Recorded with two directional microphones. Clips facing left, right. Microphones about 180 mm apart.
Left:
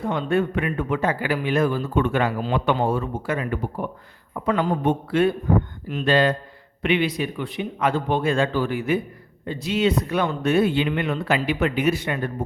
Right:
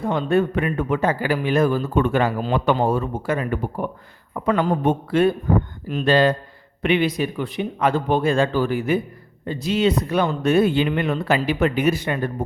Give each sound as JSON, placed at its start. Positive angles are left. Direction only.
{"t": 0.1, "sound": "a man's voice", "side_deg": -35}